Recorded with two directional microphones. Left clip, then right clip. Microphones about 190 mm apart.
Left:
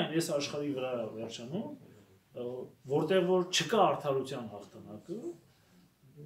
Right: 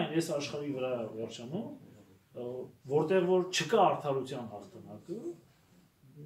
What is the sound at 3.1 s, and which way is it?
Speech, 15° left (ahead or behind).